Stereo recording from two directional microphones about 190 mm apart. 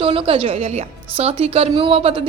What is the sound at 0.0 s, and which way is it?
Speech, 30° right (ahead or behind).